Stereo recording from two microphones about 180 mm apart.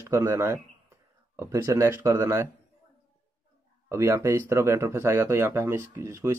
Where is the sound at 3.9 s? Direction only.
15° right (ahead or behind).